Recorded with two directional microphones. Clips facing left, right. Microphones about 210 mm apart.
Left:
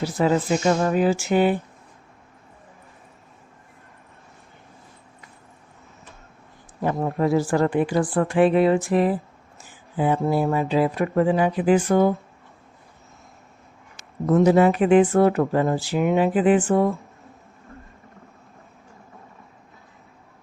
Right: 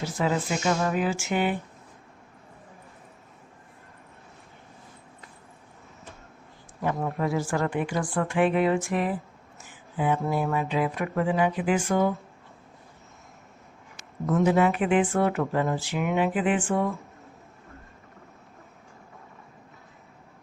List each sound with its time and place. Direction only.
0.0 s speech: 35° left (ahead or behind)
6.8 s speech: 35° left (ahead or behind)
13.9 s speech: 40° left (ahead or behind)